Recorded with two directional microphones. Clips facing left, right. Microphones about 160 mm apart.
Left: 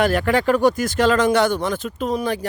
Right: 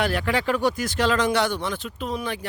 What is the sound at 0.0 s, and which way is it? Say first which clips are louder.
Speech: left 6 dB; 45° left (ahead or behind).